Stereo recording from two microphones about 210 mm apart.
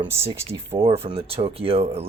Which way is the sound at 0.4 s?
25° right (ahead or behind).